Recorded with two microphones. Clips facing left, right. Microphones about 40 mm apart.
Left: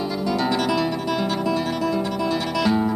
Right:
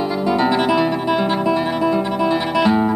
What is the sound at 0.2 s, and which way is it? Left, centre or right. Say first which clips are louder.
Music: right 6 dB; right.